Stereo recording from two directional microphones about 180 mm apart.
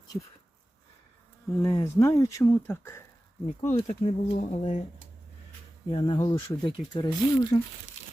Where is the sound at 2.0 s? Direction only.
15° left (ahead or behind).